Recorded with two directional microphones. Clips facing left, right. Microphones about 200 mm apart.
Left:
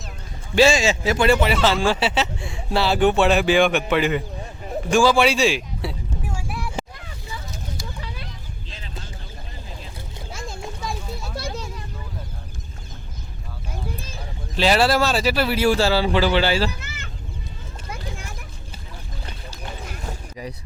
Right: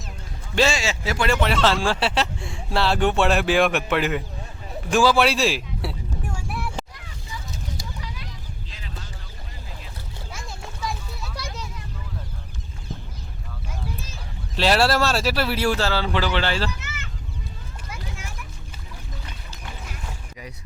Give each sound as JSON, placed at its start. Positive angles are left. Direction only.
{"t": 0.5, "sound": "speech", "side_deg": 15}
{"t": 1.4, "sound": "speech", "side_deg": 5}
{"t": 14.5, "sound": "speech", "side_deg": 0}
{"t": 19.2, "sound": "a sound", "side_deg": 30}